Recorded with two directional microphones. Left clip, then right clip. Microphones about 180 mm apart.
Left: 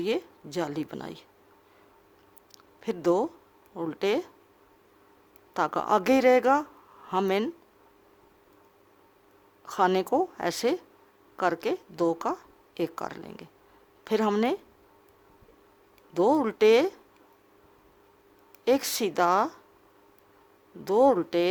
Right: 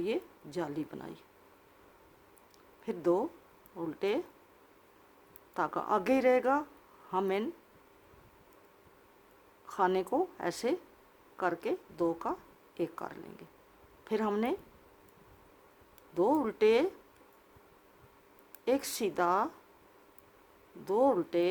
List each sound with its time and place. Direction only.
0.0 s speech: 55° left (ahead or behind)
2.8 s a woman's voice: 55° left (ahead or behind)
5.5 s a woman's voice: 55° left (ahead or behind)
9.6 s a woman's voice: 55° left (ahead or behind)
16.1 s a woman's voice: 55° left (ahead or behind)
18.6 s a woman's voice: 55° left (ahead or behind)
20.8 s a woman's voice: 55° left (ahead or behind)